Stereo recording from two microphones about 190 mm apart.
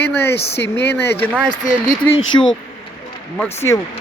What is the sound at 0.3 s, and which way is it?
Speech, 65° left (ahead or behind).